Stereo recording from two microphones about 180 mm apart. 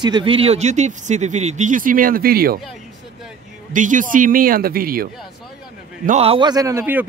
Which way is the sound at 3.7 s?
45° right (ahead or behind).